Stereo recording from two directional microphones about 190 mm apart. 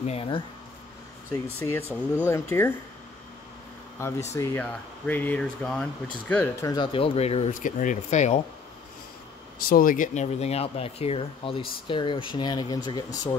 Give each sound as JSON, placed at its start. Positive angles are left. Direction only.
{"t": 0.0, "sound": "speech", "side_deg": 30}
{"t": 1.3, "sound": "speech", "side_deg": 15}
{"t": 4.4, "sound": "speech", "side_deg": 10}
{"t": 9.6, "sound": "speech", "side_deg": 50}